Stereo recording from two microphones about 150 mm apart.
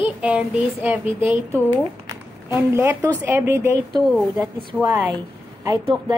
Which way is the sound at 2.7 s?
15° right (ahead or behind).